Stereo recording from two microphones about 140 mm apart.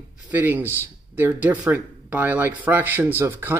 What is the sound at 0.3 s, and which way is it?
Speech, 10° right (ahead or behind).